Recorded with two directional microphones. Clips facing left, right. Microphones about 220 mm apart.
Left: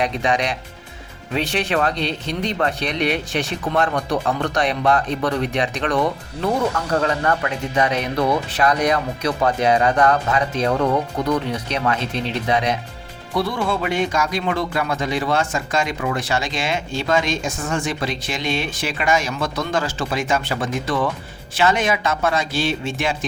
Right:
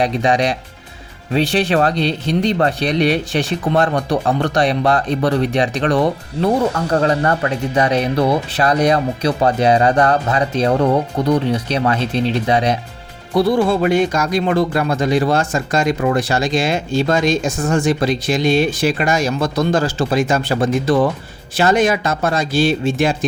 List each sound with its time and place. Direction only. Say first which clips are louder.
0.0 s speech: right 5 dB; 35° right (ahead or behind)